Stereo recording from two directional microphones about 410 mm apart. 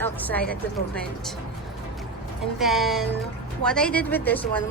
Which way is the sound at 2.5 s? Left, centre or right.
Centre.